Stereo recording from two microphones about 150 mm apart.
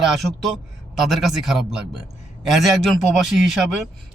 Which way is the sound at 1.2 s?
Centre (ahead or behind).